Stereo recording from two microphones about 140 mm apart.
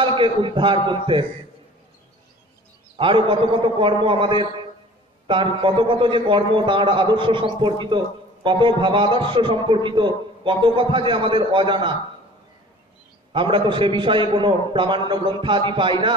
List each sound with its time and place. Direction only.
0.0 s a man's voice: 35° right (ahead or behind)
3.0 s a man's voice: 35° right (ahead or behind)
8.5 s a man's voice: 35° right (ahead or behind)
13.3 s a man's voice: 35° right (ahead or behind)